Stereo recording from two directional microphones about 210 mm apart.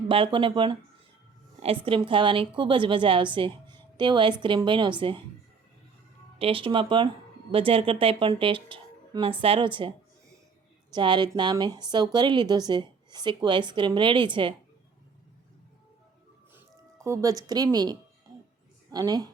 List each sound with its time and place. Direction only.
0.1 s speech: 25° right (ahead or behind)
6.4 s speech: 25° right (ahead or behind)
10.9 s speech: 20° right (ahead or behind)
16.6 s a woman's voice: 15° right (ahead or behind)